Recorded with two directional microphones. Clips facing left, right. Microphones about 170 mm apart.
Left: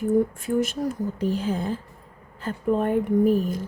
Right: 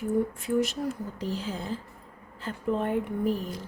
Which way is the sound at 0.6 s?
50° left (ahead or behind).